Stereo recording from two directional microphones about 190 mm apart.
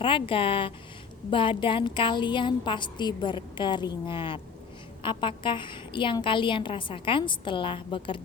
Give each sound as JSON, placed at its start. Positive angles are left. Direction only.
{"t": 0.0, "sound": "a woman's voice", "side_deg": 25}